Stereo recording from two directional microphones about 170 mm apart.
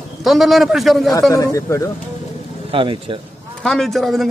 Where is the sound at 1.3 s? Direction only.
20° left (ahead or behind).